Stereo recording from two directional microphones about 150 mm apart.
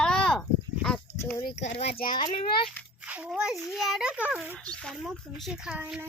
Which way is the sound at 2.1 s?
30° left (ahead or behind).